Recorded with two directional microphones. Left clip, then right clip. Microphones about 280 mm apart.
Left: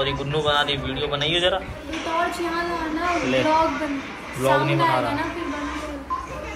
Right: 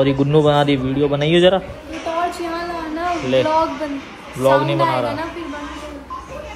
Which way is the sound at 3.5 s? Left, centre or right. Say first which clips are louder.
Right 2 dB; centre.